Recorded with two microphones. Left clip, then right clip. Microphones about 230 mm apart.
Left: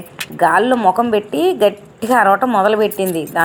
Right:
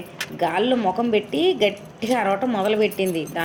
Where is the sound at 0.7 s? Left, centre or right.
Centre.